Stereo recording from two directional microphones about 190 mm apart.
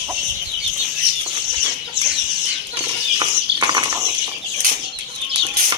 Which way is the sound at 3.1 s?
20° right (ahead or behind).